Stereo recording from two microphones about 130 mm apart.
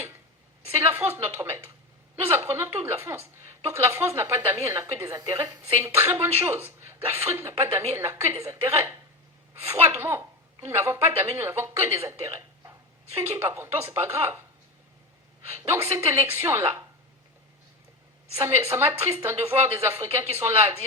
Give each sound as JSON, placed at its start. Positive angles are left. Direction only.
{"t": 0.7, "sound": "a sound", "side_deg": -20}
{"t": 3.7, "sound": "a woman's voice", "side_deg": -20}
{"t": 15.4, "sound": "a woman's voice", "side_deg": -20}
{"t": 18.3, "sound": "a woman's voice", "side_deg": -20}